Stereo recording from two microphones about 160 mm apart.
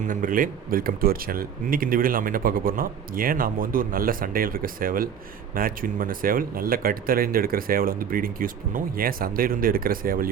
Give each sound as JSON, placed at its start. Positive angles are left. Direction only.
{"t": 0.0, "sound": "speech", "side_deg": -55}